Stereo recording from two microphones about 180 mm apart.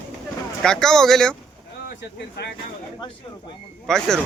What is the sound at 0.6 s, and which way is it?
Speech, 5° left (ahead or behind).